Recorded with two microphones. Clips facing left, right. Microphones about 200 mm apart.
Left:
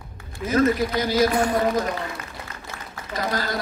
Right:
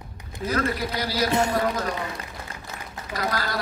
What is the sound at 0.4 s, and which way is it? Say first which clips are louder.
Speech: left 2 dB; 35° right (ahead or behind).